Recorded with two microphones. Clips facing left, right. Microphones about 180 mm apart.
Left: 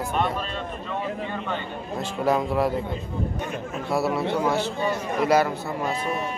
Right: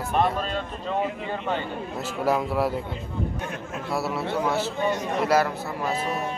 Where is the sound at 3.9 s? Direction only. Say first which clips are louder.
Left 4 dB; centre (ahead or behind).